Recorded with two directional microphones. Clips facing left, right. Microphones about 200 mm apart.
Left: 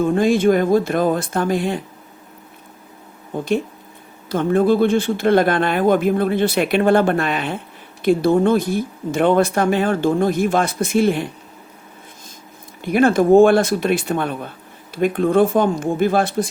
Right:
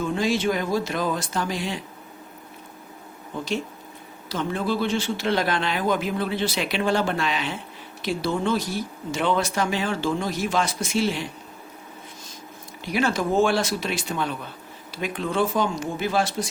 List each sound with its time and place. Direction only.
0.0 s speech: 50° left (ahead or behind)
3.3 s speech: 55° left (ahead or behind)
12.8 s speech: 55° left (ahead or behind)